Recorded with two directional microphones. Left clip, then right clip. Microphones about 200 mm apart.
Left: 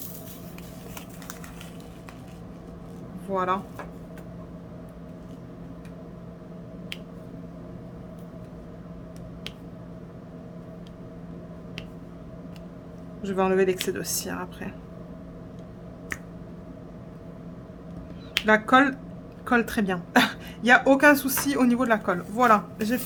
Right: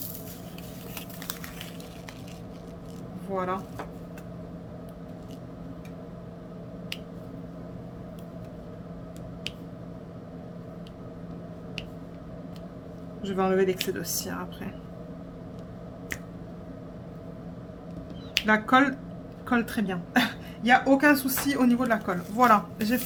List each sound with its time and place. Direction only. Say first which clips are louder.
3.3 s speech: left 4 dB; 20° left (ahead or behind)
13.2 s speech: left 2 dB; 15° left (ahead or behind)
18.3 s speech: left 3 dB; 15° left (ahead or behind)
22.4 s speech: left 1 dB; 10° left (ahead or behind)